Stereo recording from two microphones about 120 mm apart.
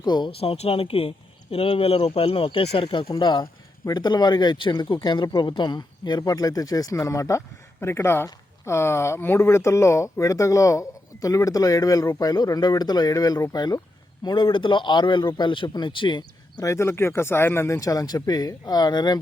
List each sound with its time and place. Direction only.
0.0 s speech: 35° left (ahead or behind)
0.3 s speech: 55° left (ahead or behind)
16.6 s speech: 20° left (ahead or behind)